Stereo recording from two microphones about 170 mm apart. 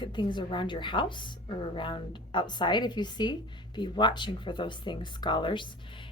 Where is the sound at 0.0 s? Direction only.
25° left (ahead or behind).